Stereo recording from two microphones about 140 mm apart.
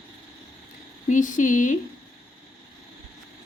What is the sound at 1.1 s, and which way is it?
Speech, 65° left (ahead or behind).